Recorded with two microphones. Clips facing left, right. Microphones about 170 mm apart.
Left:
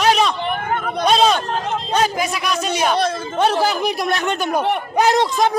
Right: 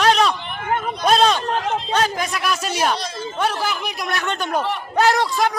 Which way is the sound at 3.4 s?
30° left (ahead or behind).